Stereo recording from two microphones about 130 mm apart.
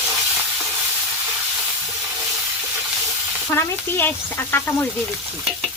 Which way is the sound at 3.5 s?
15° left (ahead or behind).